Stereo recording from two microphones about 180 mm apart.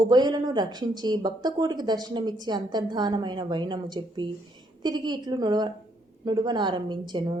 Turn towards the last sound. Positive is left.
turn(degrees=-25)  # may be behind; listen again after turning